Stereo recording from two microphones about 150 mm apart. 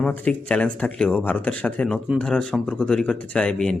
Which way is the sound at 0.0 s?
10° left (ahead or behind).